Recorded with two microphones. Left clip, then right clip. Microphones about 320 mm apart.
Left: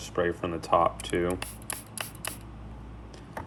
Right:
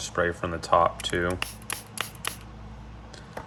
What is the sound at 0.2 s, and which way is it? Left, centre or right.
Speech, right.